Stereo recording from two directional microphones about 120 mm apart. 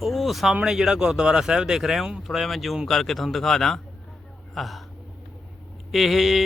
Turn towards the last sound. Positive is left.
turn(degrees=0)  # may be behind; listen again after turning